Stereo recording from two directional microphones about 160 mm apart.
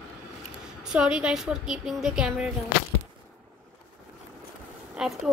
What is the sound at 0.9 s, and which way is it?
Speech, 5° right (ahead or behind).